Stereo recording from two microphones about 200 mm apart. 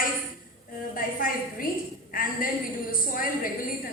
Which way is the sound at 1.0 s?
45° left (ahead or behind).